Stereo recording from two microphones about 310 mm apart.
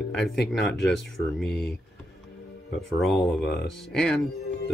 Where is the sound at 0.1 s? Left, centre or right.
Centre.